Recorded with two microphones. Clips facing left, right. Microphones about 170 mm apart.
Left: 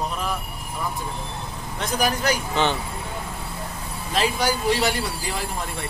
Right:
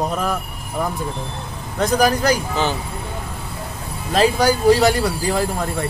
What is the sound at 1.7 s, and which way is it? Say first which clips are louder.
Speech: right 7 dB; 40° right (ahead or behind).